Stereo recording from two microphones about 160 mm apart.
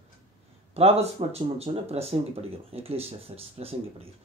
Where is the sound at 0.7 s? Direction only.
40° right (ahead or behind).